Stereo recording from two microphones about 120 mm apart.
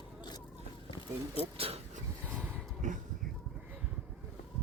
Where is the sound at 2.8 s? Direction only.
90° right.